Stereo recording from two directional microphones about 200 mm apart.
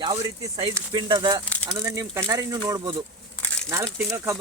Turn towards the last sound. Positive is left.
turn(degrees=-15)  # may be behind; listen again after turning